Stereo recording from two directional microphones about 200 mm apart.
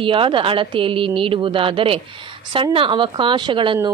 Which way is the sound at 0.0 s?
25° right (ahead or behind).